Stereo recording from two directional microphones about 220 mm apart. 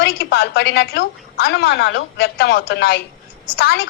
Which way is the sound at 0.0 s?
50° left (ahead or behind).